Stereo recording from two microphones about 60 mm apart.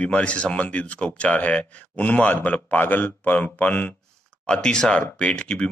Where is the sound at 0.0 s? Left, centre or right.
Left.